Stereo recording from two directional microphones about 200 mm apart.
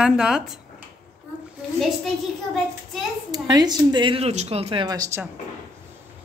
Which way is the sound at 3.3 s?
20° right (ahead or behind).